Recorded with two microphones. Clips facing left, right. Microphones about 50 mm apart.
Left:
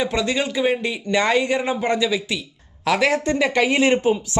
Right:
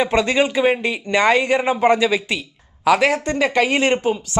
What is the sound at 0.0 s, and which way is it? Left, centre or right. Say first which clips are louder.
Speech: right 5 dB; right.